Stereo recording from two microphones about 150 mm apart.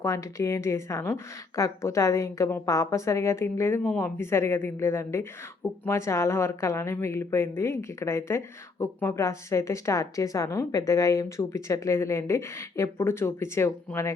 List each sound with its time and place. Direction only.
0.0 s speech: 20° left (ahead or behind)